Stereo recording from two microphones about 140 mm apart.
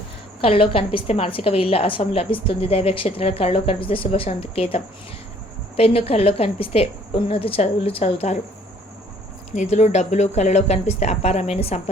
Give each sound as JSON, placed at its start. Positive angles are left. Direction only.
{"t": 0.4, "sound": "a woman's voice", "side_deg": 40}
{"t": 9.6, "sound": "a woman's voice", "side_deg": 55}